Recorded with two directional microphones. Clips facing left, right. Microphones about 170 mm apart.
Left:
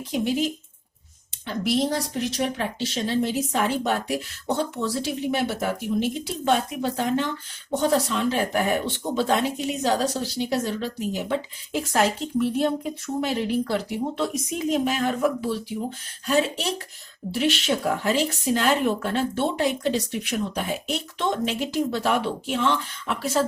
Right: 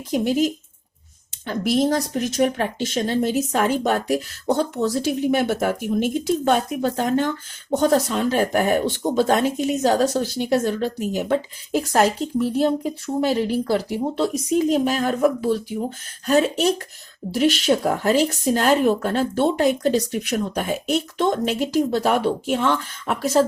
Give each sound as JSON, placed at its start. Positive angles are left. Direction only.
{"t": 0.1, "sound": "speech", "side_deg": -45}